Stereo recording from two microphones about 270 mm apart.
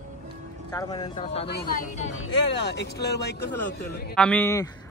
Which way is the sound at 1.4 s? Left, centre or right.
Left.